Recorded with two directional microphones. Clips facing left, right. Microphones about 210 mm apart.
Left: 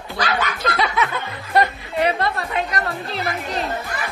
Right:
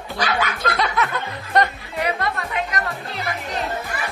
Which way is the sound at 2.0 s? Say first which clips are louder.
Left 2 dB; 30° left (ahead or behind).